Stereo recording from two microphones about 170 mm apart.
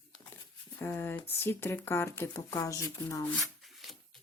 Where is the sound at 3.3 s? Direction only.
Centre (ahead or behind).